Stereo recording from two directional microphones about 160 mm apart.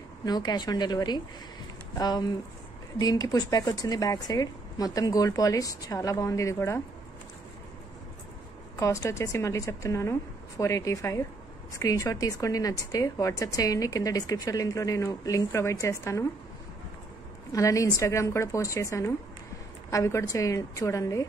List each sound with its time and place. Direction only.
0.2 s a woman's voice: 25° left (ahead or behind)
8.7 s a woman's voice: 20° left (ahead or behind)
17.5 s a woman's voice: 20° left (ahead or behind)